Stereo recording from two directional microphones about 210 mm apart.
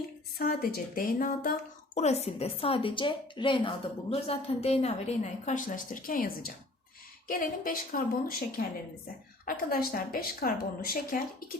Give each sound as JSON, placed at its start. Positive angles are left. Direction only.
{"t": 0.3, "sound": "speech", "side_deg": 45}
{"t": 2.0, "sound": "a woman's voice", "side_deg": 30}
{"t": 9.5, "sound": "speech", "side_deg": 45}